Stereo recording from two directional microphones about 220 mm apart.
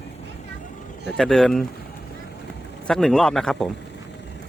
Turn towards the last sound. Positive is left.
turn(degrees=0)  # may be behind; listen again after turning